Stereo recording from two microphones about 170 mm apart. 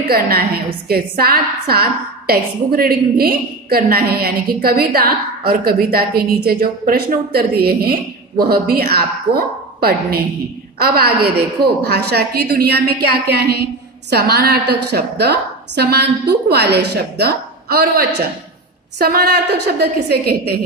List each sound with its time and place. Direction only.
0.8 s a woman's voice: 65° right (ahead or behind)